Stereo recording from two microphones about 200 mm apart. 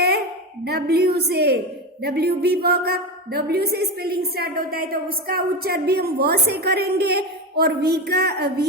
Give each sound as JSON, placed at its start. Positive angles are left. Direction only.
{"t": 0.6, "sound": "a woman's voice", "side_deg": -55}